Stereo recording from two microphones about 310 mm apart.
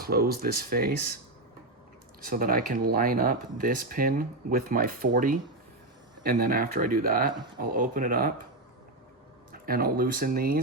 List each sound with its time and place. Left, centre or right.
0.0 s speech: right
2.2 s speech: right
7.3 s speech: centre
7.6 s speech: right
9.5 s speech: right